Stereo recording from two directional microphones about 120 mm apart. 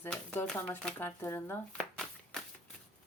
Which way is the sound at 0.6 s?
15° left (ahead or behind).